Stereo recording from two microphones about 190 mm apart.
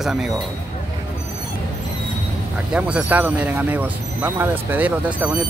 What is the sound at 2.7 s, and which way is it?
Speech, 5° right (ahead or behind).